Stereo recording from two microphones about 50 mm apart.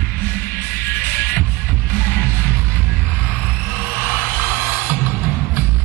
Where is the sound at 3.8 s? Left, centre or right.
Right.